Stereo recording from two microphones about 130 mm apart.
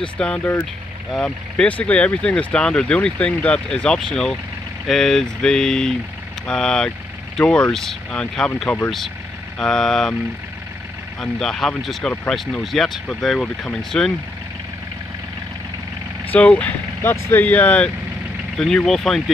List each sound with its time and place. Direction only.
0.2 s speech: 10° left (ahead or behind)
11.1 s speech: 5° left (ahead or behind)
16.3 s speech: 10° left (ahead or behind)